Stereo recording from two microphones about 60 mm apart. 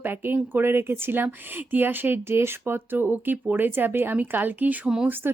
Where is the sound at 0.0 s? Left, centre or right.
Right.